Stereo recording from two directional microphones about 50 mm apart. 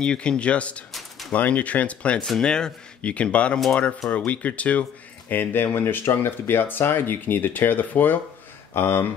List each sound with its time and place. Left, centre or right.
0.0 s speech: centre
2.1 s speech: centre
2.4 s speech: centre
5.3 s speech: left